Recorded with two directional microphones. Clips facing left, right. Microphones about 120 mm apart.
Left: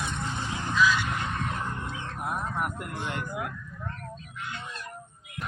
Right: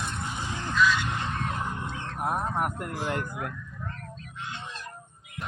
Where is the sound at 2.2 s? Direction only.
40° right (ahead or behind).